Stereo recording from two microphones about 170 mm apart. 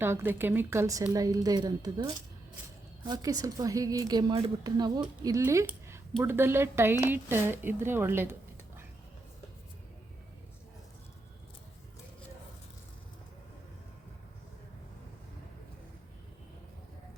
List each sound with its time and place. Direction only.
0.0 s a woman's voice: 15° right (ahead or behind)